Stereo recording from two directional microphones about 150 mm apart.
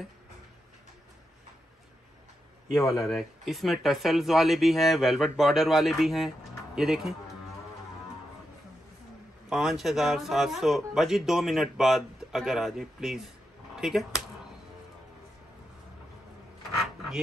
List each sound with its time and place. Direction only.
2.7 s a man's voice: 20° left (ahead or behind)
3.1 s a man's voice: centre (ahead or behind)
9.5 s a man's voice: centre (ahead or behind)